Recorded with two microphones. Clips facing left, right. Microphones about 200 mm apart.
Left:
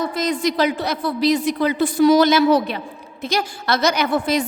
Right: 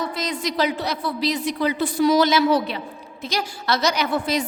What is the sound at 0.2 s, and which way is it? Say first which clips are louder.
A woman's voice: left 5 dB; 50° left (ahead or behind).